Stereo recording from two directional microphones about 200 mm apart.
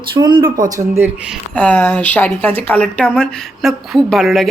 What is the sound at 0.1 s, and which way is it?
Speech, 25° right (ahead or behind).